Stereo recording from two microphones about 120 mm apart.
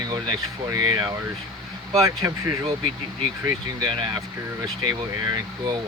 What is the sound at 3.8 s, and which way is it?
Speech, 40° right (ahead or behind).